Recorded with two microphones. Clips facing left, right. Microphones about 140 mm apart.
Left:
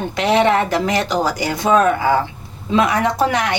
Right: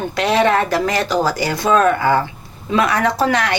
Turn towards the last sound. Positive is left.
turn(degrees=20)  # may be behind; listen again after turning